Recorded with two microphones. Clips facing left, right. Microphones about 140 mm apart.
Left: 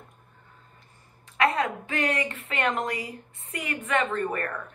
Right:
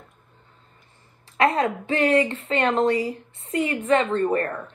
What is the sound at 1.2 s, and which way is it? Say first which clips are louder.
Speech: right 4 dB; 35° right (ahead or behind).